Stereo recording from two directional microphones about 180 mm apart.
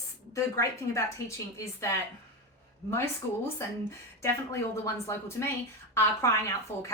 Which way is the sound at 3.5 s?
15° left (ahead or behind).